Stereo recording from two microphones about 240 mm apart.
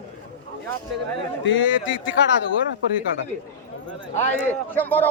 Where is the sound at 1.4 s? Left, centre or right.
Left.